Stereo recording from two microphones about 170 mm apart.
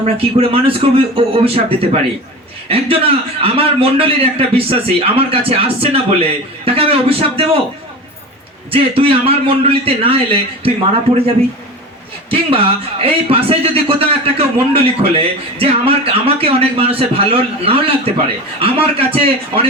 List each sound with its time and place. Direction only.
0.0 s speech: 40° right (ahead or behind)
8.7 s speech: 35° right (ahead or behind)
12.3 s speech: 35° right (ahead or behind)